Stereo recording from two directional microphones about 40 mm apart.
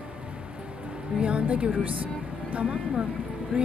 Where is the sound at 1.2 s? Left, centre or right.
Right.